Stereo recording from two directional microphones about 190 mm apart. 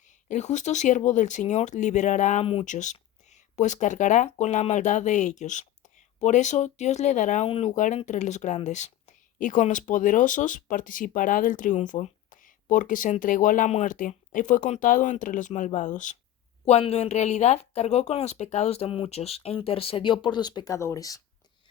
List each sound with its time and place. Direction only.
0.0 s speech: 40° left (ahead or behind); by 21.2 s 15° left (ahead or behind)